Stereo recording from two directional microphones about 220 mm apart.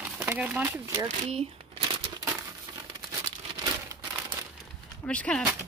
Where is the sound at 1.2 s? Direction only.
25° right (ahead or behind).